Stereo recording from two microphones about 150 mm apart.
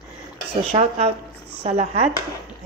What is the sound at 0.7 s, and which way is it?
Speech, 45° right (ahead or behind).